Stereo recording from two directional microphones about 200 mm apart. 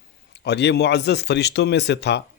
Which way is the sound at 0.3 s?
55° left (ahead or behind).